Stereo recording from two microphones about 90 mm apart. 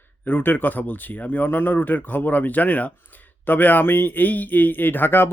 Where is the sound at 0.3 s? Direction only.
20° left (ahead or behind).